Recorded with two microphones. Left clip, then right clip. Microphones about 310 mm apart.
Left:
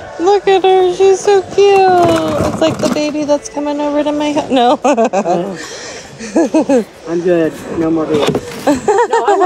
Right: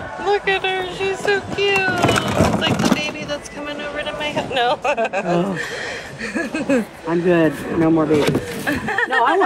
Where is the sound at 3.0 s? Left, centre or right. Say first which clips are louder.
Left 11 dB; centre.